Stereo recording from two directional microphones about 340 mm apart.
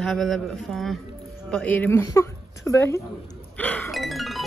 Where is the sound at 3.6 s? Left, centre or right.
Centre.